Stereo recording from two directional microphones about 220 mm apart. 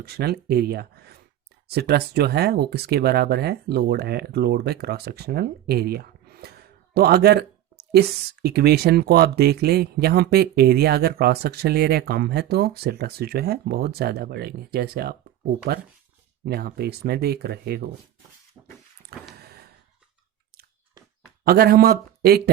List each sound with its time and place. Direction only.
0.0 s speech: 45° right (ahead or behind)
16.5 s speech: 45° right (ahead or behind)
19.4 s a sound: 45° right (ahead or behind)
21.4 s speech: 45° right (ahead or behind)